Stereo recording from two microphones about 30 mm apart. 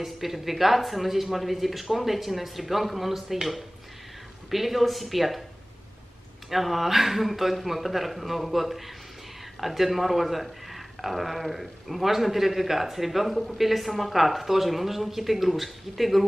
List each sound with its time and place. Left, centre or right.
0.0 s speech: centre
4.5 s speech: centre
6.5 s speech: centre